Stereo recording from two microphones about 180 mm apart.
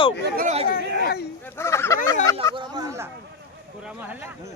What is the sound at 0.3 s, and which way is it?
Speech, 40° right (ahead or behind).